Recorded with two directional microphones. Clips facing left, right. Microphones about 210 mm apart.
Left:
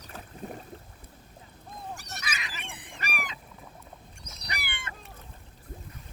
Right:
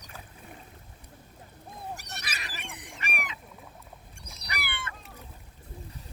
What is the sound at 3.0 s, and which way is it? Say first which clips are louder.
Goose: left 1 dB; 35° left (ahead or behind).